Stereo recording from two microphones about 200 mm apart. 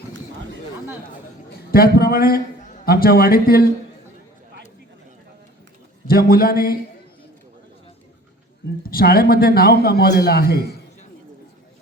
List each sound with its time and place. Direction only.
1.7 s a man's voice: 50° left (ahead or behind)
6.1 s a man's voice: 50° left (ahead or behind)
8.9 s a man's voice: 50° left (ahead or behind)